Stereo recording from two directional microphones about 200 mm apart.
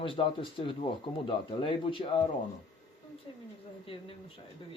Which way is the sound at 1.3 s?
25° left (ahead or behind).